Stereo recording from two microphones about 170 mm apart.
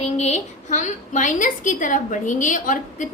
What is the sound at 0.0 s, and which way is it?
A woman's voice, 40° left (ahead or behind).